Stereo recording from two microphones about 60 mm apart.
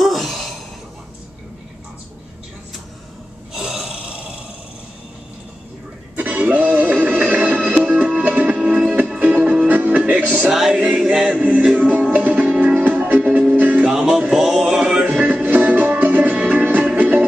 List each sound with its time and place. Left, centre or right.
0.0 s a sound: centre
3.5 s a sound: centre
6.1 s music: right
10.5 s music: centre
11.4 s music: right
13.9 s music: centre
14.2 s male singing: centre
15.4 s music: right